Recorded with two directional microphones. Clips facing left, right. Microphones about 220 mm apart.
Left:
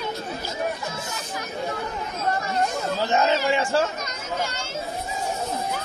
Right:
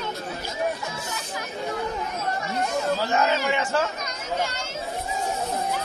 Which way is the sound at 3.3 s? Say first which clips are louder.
Left 2 dB; 30° left (ahead or behind).